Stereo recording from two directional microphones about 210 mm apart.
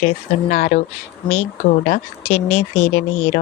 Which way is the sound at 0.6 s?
45° left (ahead or behind).